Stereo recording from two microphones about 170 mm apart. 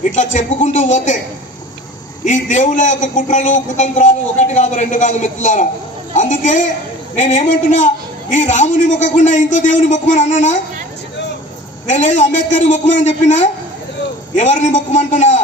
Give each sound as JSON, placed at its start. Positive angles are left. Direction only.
{"t": 0.0, "sound": "a man's voice", "side_deg": 45}
{"t": 2.2, "sound": "a man's voice", "side_deg": 45}
{"t": 11.9, "sound": "a man's voice", "side_deg": 45}
{"t": 14.3, "sound": "a man's voice", "side_deg": 45}